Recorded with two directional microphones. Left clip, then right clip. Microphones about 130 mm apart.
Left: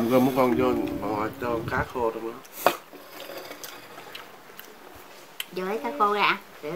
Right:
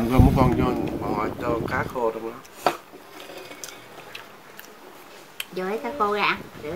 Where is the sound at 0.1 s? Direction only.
5° right (ahead or behind).